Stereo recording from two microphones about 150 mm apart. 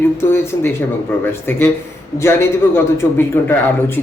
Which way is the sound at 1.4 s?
15° left (ahead or behind).